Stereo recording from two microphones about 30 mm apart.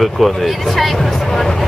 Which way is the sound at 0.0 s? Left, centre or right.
Centre.